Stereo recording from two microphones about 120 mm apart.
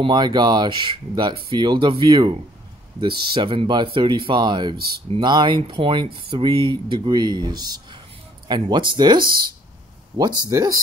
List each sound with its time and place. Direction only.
0.0 s speech: 40° right (ahead or behind)
10.5 s speech: 25° right (ahead or behind)